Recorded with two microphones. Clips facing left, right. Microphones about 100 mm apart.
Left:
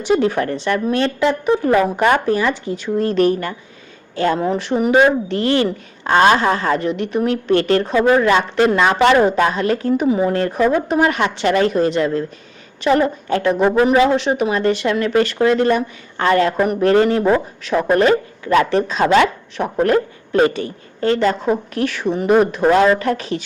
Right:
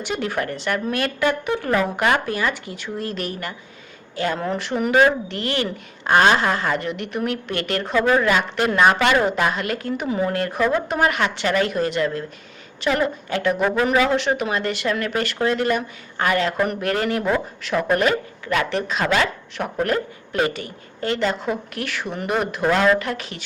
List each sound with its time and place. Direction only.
0.1 s speech: 35° left (ahead or behind)
4.4 s a woman's voice: 20° left (ahead or behind)
7.9 s a woman's voice: 20° left (ahead or behind)
11.4 s speech: 40° left (ahead or behind)
11.7 s a woman's voice: 25° left (ahead or behind)
12.8 s a woman's voice: 35° left (ahead or behind)